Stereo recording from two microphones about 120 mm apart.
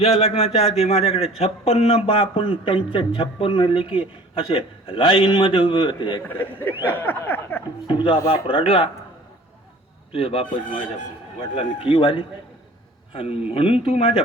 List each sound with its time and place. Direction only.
0.0 s a man's voice: 60° left (ahead or behind); by 6.2 s 40° left (ahead or behind)
6.2 s a sound: 15° left (ahead or behind)
7.9 s speech: 45° left (ahead or behind)
10.1 s a man's voice: 50° left (ahead or behind)
11.5 s speech: 50° left (ahead or behind)
13.5 s speech: 50° left (ahead or behind)